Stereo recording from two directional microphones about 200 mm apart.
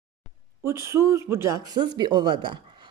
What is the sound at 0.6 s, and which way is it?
Speech, 15° right (ahead or behind).